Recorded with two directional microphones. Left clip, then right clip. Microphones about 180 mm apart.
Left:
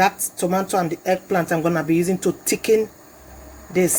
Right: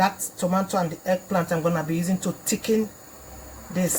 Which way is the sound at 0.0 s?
50° left (ahead or behind).